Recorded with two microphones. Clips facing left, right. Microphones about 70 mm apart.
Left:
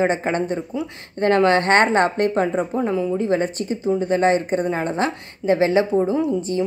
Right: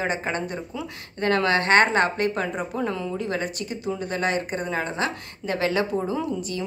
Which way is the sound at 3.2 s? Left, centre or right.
Left.